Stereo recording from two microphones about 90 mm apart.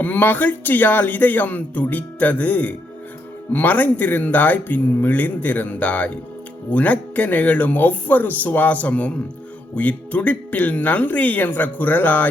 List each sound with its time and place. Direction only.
0.0 s speech: 20° left (ahead or behind)